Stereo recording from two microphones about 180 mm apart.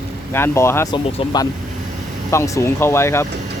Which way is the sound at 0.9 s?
25° left (ahead or behind).